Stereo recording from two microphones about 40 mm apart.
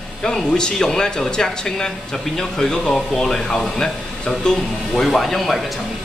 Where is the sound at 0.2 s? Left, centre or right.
Centre.